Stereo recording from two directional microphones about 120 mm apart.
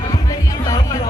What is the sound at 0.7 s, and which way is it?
Music, 30° left (ahead or behind).